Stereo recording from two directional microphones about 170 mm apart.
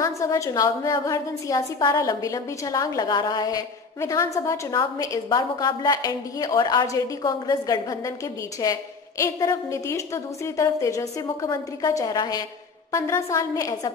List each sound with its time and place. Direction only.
0.0 s a woman's voice: 20° left (ahead or behind)